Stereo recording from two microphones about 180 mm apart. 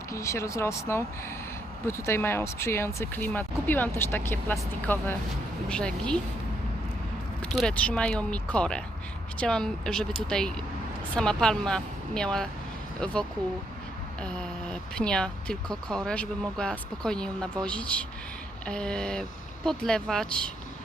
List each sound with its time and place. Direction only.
0.1 s speech: 15° left (ahead or behind)
7.4 s speech: centre (ahead or behind)
14.2 s speech: 5° left (ahead or behind)